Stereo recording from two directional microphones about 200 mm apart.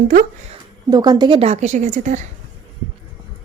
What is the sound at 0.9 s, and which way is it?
A woman's voice, 20° right (ahead or behind).